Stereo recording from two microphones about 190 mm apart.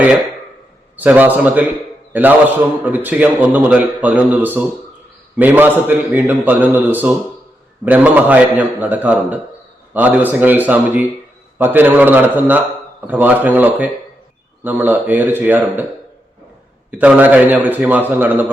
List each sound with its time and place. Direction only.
0.9 s a man's voice: 10° right (ahead or behind)
16.9 s a man's voice: 10° right (ahead or behind)